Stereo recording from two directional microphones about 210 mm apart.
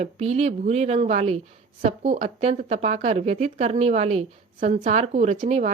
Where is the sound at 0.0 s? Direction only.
30° right (ahead or behind).